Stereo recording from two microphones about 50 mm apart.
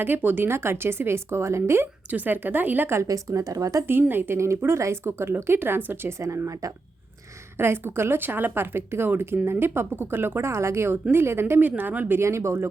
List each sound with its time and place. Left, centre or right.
0.0 s speech: right
2.0 s a woman's voice: right
2.9 s speech: right
3.8 s a woman's voice: right
4.4 s speech: right
6.1 s speech: right
7.6 s speech: right
8.2 s a woman's voice: right
10.5 s speech: right
11.1 s speech: right
11.8 s a woman's voice: right
12.2 s speech: right